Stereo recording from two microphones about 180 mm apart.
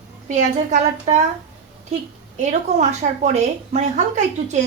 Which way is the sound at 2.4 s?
40° right (ahead or behind).